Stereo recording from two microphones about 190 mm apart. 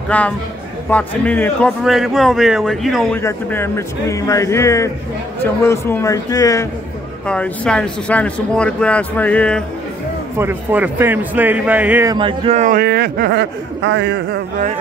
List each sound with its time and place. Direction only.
0.1 s a man's voice: 10° left (ahead or behind)
3.2 s speech: 15° left (ahead or behind)
7.2 s speech: 5° left (ahead or behind)
10.3 s speech: 10° right (ahead or behind)
12.2 s speech: 30° right (ahead or behind)
12.7 s speech: 55° right (ahead or behind)